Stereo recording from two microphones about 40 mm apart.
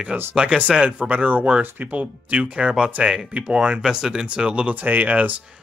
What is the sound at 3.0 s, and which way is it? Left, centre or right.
Speech, centre.